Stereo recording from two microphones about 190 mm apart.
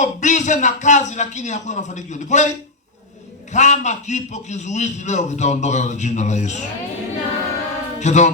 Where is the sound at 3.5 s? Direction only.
40° left (ahead or behind).